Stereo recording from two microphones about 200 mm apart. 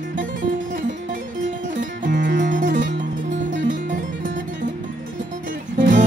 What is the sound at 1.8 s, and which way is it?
Music, 40° right (ahead or behind).